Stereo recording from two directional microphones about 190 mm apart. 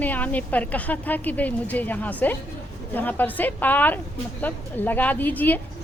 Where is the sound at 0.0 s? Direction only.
10° left (ahead or behind).